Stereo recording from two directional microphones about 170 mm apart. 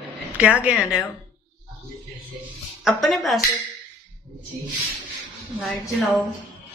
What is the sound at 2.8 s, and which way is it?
Speech, centre (ahead or behind).